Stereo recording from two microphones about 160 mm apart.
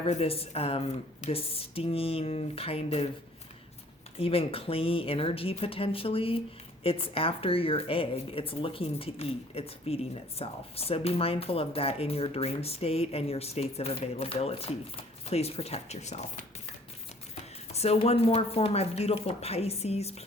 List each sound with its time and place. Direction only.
0.0 s a woman's voice: 40° left (ahead or behind)
4.2 s a woman's voice: 35° left (ahead or behind)
17.7 s a woman's voice: 40° left (ahead or behind)